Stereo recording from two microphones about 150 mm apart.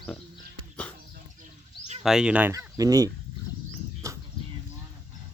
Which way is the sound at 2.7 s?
25° right (ahead or behind).